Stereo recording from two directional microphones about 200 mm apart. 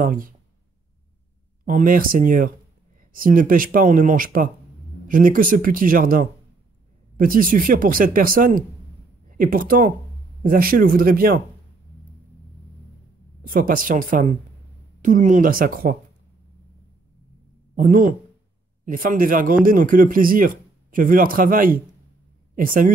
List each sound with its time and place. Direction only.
0.0 s speech: 45° right (ahead or behind)
1.7 s speech: 45° right (ahead or behind)
13.5 s speech: 45° right (ahead or behind)
17.8 s speech: 40° right (ahead or behind)